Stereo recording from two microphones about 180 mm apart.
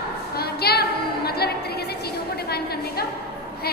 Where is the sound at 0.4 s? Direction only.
60° left (ahead or behind).